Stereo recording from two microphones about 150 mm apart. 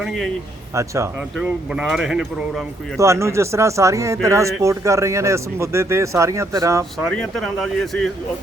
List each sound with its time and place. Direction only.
0.0 s speech: centre (ahead or behind)
1.4 s speech: 5° right (ahead or behind)
3.0 s speech: 20° right (ahead or behind)
7.1 s speech: centre (ahead or behind)